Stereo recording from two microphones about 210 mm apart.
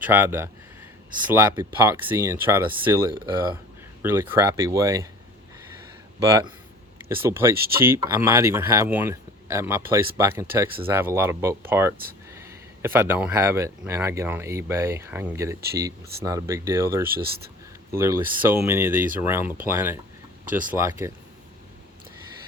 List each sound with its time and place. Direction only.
0.0 s speech: 10° right (ahead or behind)
6.1 s speech: 15° right (ahead or behind)